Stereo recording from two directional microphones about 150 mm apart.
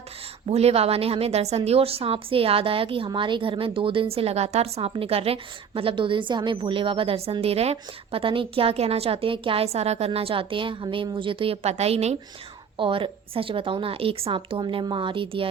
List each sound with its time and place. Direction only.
0.4 s a woman's voice: 45° right (ahead or behind)
12.7 s a woman's voice: 35° right (ahead or behind)